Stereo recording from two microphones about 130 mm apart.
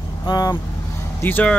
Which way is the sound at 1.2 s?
15° left (ahead or behind).